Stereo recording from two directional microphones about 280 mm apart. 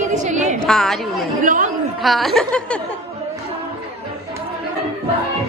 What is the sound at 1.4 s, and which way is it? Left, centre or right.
Speech, right.